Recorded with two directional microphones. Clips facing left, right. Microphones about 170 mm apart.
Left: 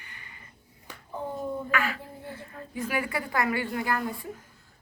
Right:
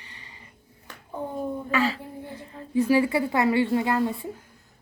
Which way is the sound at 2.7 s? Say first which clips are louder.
Right 10 dB; 30° right (ahead or behind).